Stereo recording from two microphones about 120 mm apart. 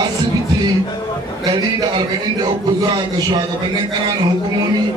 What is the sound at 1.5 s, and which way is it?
A man's voice, 35° right (ahead or behind).